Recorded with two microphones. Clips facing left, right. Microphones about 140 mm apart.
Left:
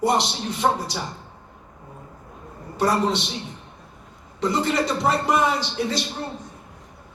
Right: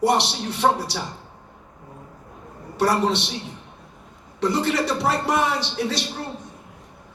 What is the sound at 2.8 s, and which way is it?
Speech, 75° right (ahead or behind).